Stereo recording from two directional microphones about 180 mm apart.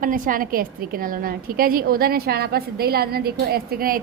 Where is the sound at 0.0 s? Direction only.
50° right (ahead or behind).